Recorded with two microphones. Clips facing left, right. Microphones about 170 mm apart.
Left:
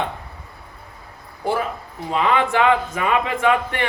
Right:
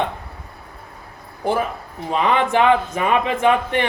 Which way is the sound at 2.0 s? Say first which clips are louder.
Right 1 dB; 20° right (ahead or behind).